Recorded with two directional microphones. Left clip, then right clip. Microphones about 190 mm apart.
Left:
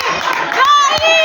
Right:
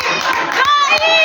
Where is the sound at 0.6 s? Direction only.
25° left (ahead or behind).